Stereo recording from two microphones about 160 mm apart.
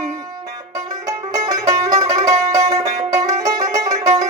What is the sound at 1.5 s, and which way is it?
Music, 20° right (ahead or behind).